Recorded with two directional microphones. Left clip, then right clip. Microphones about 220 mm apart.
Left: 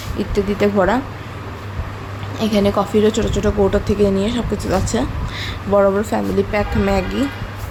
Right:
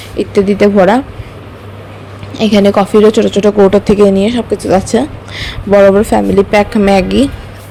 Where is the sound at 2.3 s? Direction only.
30° right (ahead or behind).